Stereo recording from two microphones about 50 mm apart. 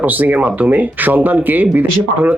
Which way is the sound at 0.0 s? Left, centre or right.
Right.